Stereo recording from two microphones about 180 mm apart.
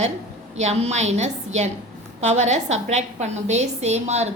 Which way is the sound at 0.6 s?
40° right (ahead or behind).